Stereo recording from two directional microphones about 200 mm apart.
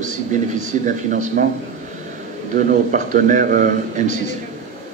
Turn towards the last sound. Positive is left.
turn(degrees=-40)  # may be behind; listen again after turning